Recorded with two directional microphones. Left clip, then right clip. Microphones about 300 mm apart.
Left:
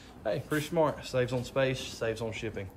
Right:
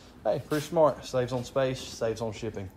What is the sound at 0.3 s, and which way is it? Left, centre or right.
Speech, centre.